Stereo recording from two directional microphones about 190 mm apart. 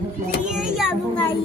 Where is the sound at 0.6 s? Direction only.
5° right (ahead or behind).